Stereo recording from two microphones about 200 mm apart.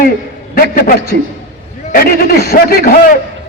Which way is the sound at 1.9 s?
50° left (ahead or behind).